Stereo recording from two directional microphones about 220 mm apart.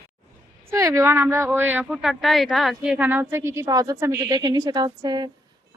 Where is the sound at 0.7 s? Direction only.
15° right (ahead or behind).